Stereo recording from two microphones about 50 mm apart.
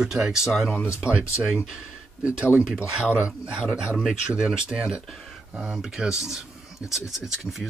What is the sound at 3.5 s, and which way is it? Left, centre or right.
Speech, centre.